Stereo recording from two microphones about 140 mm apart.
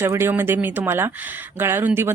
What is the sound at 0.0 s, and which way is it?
Speech, 15° right (ahead or behind).